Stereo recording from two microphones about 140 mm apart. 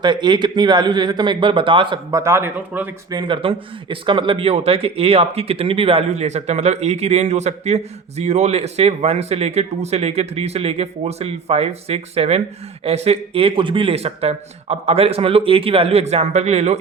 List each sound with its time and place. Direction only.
0.0 s speech: 35° right (ahead or behind)
2.0 s speech: 20° right (ahead or behind)
3.1 s speech: 35° right (ahead or behind); by 16.7 s 50° right (ahead or behind)